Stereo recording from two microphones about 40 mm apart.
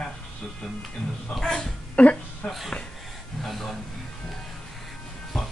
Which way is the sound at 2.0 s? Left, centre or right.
Left.